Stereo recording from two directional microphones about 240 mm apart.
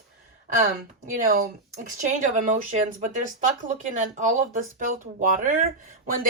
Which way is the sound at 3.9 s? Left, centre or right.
Right.